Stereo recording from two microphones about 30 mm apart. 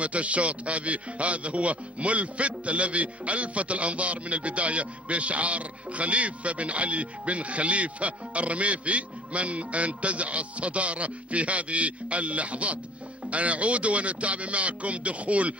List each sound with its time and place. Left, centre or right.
0.0 s a man's voice: right